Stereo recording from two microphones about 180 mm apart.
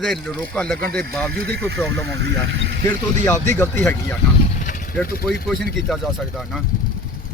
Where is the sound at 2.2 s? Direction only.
80° right.